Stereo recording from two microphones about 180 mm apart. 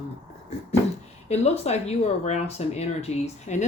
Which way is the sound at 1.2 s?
35° left (ahead or behind).